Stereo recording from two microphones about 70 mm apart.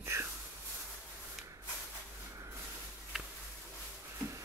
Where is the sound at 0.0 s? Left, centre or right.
Right.